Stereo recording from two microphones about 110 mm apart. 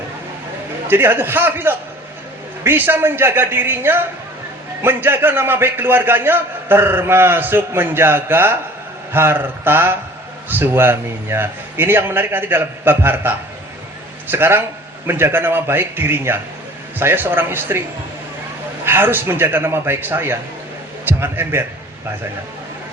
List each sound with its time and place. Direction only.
0.9 s a man's voice: 20° right (ahead or behind)
18.9 s a man's voice: 20° right (ahead or behind)